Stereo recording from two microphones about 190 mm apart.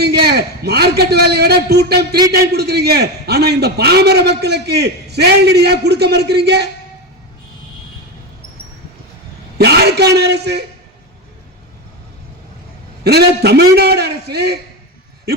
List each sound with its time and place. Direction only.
0.0 s a man's voice: 60° right (ahead or behind)
9.6 s a man's voice: 60° right (ahead or behind)
13.1 s a man's voice: 60° right (ahead or behind)